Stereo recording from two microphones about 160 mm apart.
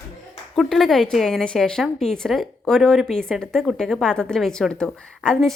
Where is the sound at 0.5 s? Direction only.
Centre (ahead or behind).